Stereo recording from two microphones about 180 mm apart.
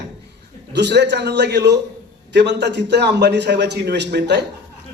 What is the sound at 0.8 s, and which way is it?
A man's voice, 70° right (ahead or behind).